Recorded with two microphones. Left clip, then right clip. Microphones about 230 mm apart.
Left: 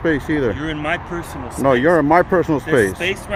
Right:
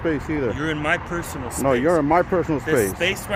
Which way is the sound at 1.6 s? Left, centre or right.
Centre.